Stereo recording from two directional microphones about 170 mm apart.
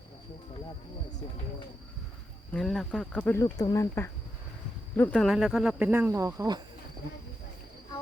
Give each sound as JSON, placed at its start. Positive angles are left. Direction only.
{"t": 2.5, "sound": "speech", "side_deg": 0}
{"t": 5.9, "sound": "speech", "side_deg": -15}